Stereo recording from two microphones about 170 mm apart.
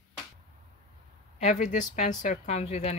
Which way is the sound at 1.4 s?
45° left (ahead or behind).